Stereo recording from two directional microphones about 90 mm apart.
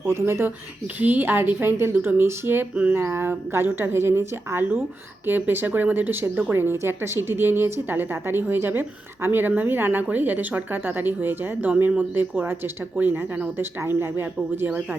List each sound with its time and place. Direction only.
0.0 s a woman's voice: 30° right (ahead or behind)